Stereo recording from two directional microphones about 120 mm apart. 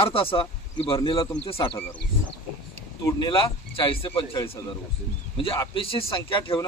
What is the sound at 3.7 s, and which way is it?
Speech, 50° left (ahead or behind).